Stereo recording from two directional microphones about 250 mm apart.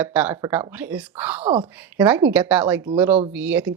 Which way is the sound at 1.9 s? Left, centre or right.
Centre.